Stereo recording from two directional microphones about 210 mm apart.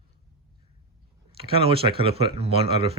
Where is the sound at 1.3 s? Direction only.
25° right (ahead or behind).